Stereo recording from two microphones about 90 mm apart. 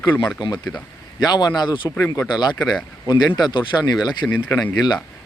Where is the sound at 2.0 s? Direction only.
35° left (ahead or behind).